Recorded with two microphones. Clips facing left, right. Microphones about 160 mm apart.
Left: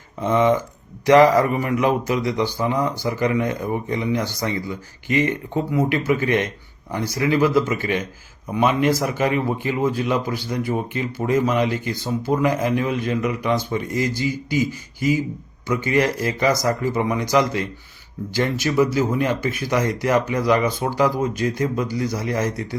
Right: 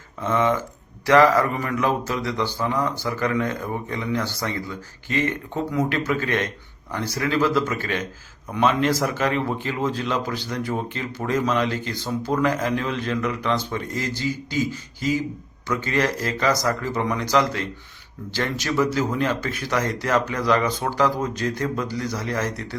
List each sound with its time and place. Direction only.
0.2 s a man's voice: 15° left (ahead or behind)
18.6 s a man's voice: 10° left (ahead or behind)